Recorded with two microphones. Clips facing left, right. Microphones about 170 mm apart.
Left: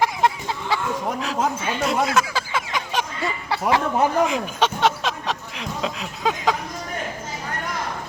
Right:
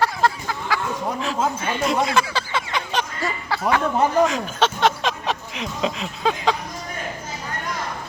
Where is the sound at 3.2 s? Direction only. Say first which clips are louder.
Even; 25° left (ahead or behind).